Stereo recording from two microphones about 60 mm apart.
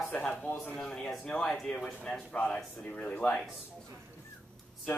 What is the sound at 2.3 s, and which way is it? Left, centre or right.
Speech, left.